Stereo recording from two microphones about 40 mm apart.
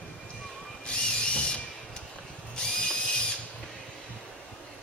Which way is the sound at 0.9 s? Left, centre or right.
Left.